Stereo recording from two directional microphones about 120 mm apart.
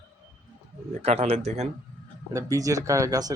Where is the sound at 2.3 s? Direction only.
25° right (ahead or behind).